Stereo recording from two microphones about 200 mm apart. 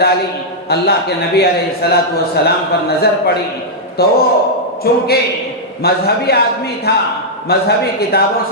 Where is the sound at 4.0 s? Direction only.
50° left (ahead or behind).